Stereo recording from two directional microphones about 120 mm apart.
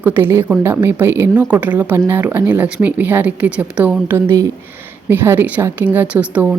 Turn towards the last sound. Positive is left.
turn(degrees=-15)  # may be behind; listen again after turning